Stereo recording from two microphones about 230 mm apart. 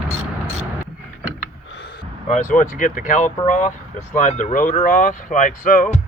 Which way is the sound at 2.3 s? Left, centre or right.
Left.